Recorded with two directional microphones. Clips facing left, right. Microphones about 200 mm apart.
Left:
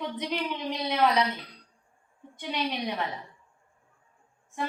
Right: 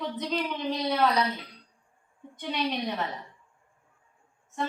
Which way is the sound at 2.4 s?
10° left (ahead or behind).